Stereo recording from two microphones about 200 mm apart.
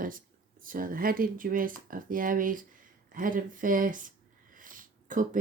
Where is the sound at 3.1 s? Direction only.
40° right (ahead or behind).